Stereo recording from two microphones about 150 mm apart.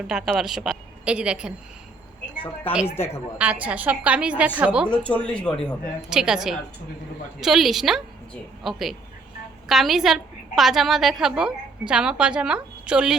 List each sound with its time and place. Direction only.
0.1 s a woman's voice: 5° right (ahead or behind)
2.8 s speech: 15° left (ahead or behind)
3.3 s a woman's voice: 10° right (ahead or behind)
5.0 s speech: 10° left (ahead or behind)
6.1 s a woman's voice: 5° right (ahead or behind)